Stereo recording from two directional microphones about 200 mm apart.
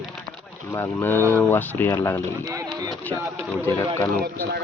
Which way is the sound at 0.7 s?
10° left (ahead or behind).